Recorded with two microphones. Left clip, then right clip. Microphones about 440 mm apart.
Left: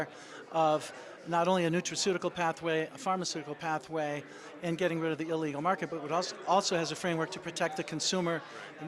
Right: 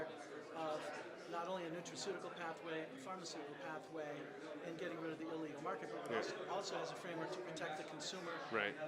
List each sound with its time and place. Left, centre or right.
0.5 s a man's voice: left